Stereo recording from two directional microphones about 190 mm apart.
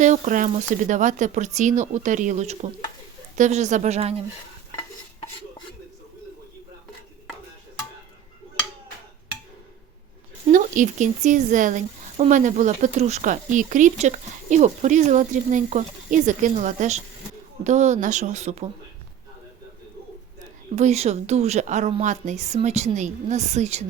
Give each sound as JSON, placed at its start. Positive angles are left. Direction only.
{"t": 0.0, "sound": "a woman's voice", "side_deg": -40}
{"t": 10.5, "sound": "a woman's voice", "side_deg": -40}
{"t": 20.7, "sound": "a woman's voice", "side_deg": -35}